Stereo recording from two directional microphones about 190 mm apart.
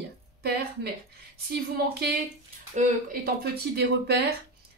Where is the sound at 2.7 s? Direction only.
45° right (ahead or behind).